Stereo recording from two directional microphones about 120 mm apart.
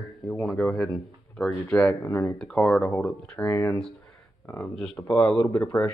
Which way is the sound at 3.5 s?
25° left (ahead or behind).